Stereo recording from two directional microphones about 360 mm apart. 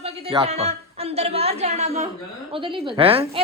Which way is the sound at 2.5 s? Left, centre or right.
Centre.